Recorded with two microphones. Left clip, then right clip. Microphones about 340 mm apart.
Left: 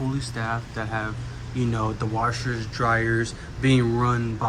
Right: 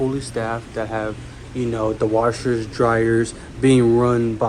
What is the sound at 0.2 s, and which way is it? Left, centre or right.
Speech, centre.